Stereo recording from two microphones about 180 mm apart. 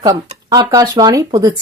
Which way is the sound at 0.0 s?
25° right (ahead or behind).